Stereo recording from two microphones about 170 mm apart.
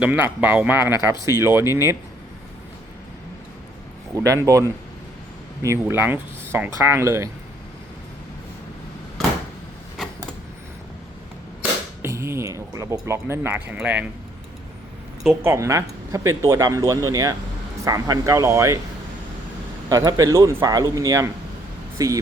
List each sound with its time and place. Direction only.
0.0 s speech: 10° right (ahead or behind)
4.1 s speech: 20° right (ahead or behind)
12.0 s speech: 15° right (ahead or behind)
15.4 s speech: 15° right (ahead or behind)
19.9 s speech: 20° right (ahead or behind)